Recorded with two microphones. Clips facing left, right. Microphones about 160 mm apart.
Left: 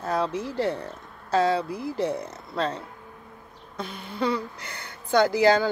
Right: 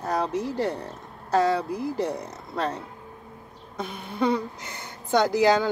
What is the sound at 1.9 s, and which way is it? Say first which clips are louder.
A woman's voice: left 1 dB; 15° right (ahead or behind).